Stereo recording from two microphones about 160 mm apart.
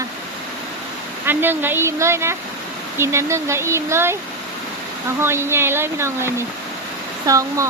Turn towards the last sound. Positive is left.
turn(degrees=-20)  # may be behind; listen again after turning